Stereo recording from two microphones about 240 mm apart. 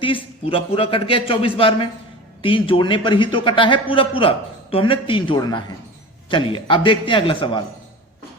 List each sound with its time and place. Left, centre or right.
0.0 s a man's voice: left